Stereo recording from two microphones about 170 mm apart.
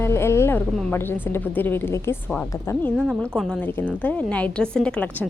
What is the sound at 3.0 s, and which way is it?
A woman's voice, centre (ahead or behind).